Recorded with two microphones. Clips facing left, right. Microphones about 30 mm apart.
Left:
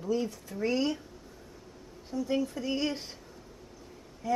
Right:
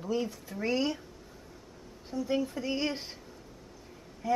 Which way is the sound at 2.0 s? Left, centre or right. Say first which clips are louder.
Even; centre.